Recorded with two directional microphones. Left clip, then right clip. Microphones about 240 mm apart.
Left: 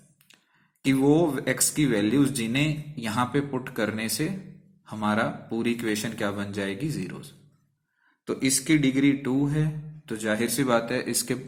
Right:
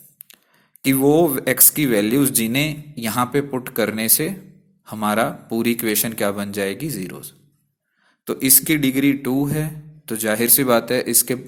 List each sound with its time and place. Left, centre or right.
0.8 s speech: right